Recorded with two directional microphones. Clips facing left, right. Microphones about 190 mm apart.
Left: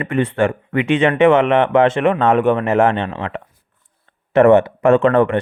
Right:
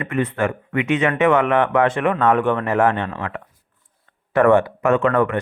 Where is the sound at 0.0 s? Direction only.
30° left (ahead or behind).